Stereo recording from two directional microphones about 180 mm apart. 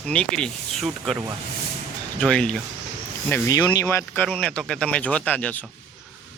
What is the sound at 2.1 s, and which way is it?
Speech, 5° left (ahead or behind).